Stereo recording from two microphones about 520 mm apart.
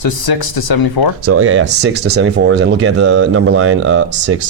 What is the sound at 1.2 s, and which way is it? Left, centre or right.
Speech, right.